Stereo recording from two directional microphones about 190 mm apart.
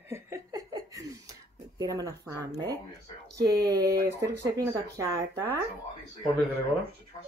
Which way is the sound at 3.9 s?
60° right (ahead or behind).